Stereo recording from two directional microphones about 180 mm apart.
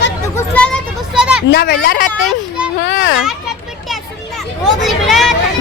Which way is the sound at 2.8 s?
90° left.